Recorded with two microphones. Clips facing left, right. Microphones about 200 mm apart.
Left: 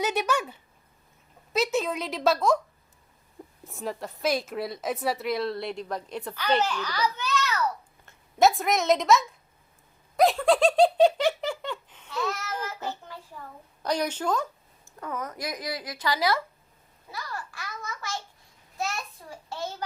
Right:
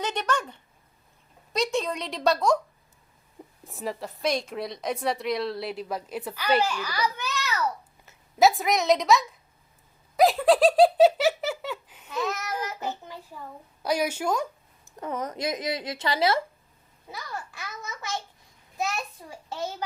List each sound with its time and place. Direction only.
0.0 s a woman's voice: 10° left (ahead or behind)
3.6 s a woman's voice: centre (ahead or behind)
10.2 s giggle: centre (ahead or behind)
12.1 s babbling: 20° right (ahead or behind)
12.6 s a child's voice: 15° right (ahead or behind)
14.9 s a woman's voice: 25° right (ahead or behind)
19.2 s a woman's voice: 20° right (ahead or behind)